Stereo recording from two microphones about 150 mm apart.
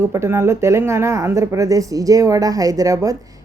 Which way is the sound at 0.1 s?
15° right (ahead or behind).